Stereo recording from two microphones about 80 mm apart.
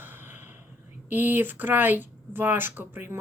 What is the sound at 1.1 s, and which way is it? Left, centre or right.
Speech, right.